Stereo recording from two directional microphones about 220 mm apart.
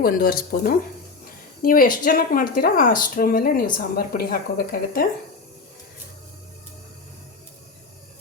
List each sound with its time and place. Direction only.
0.0 s speech: 40° left (ahead or behind)